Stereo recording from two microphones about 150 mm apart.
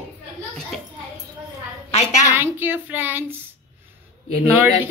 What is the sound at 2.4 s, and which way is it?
Speech, 15° right (ahead or behind).